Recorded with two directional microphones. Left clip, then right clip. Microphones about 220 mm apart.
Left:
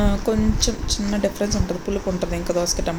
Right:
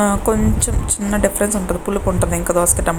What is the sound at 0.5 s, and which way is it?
Speech, 25° right (ahead or behind).